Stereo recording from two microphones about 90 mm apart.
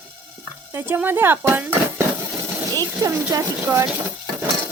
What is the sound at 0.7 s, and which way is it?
Speech, 25° right (ahead or behind).